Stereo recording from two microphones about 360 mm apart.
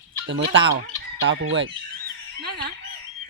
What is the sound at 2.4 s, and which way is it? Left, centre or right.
Fowl, right.